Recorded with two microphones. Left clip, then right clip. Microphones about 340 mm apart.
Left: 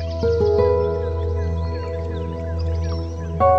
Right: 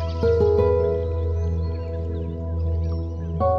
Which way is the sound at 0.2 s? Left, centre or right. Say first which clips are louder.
Left 1 dB; centre.